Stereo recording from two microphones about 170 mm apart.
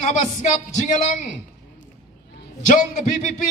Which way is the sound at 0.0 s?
45° left (ahead or behind).